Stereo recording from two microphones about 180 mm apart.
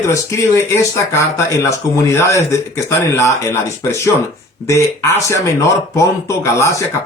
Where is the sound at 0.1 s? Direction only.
15° left (ahead or behind).